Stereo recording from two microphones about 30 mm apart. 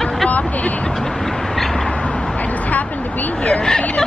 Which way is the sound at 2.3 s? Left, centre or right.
Left.